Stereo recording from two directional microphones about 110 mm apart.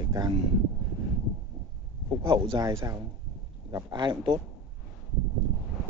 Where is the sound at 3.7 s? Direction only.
40° right (ahead or behind).